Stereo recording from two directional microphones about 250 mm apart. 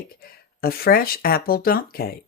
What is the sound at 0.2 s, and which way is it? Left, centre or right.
Speech, left.